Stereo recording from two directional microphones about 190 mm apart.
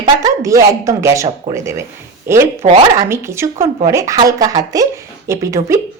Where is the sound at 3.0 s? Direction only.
15° right (ahead or behind).